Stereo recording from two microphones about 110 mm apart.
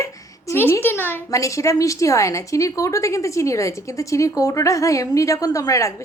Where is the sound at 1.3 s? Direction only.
30° left (ahead or behind).